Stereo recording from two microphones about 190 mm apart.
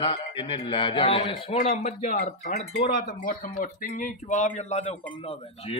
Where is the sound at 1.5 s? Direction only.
40° left (ahead or behind).